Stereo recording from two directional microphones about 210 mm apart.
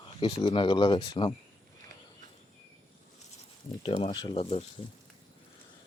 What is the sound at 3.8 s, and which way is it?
Speech, 30° left (ahead or behind).